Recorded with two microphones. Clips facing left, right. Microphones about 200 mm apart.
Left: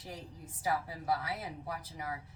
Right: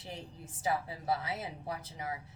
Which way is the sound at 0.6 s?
25° right (ahead or behind).